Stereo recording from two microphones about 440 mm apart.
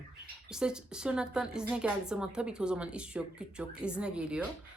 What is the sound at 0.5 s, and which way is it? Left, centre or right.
A woman's voice, centre.